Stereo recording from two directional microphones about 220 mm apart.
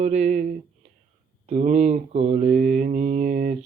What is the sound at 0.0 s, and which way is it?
Mantra, 35° right (ahead or behind).